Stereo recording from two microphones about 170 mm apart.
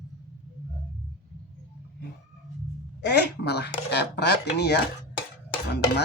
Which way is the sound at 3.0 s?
75° left (ahead or behind).